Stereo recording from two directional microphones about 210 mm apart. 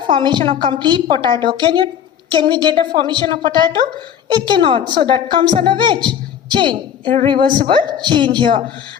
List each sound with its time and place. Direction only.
0.1 s a woman's voice: 20° right (ahead or behind)